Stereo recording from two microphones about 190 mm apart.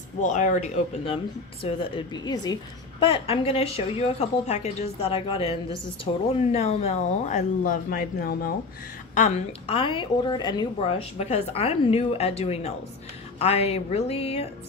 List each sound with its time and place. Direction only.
0.2 s a woman's voice: 40° left (ahead or behind)
9.1 s a woman's voice: 35° left (ahead or behind)